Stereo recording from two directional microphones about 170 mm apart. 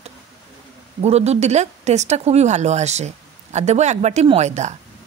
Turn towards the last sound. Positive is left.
turn(degrees=-40)  # may be behind; listen again after turning